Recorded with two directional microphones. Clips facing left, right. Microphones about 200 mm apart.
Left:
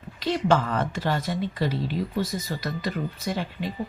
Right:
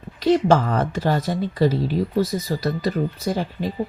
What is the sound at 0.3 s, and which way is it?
Speech, 40° right (ahead or behind).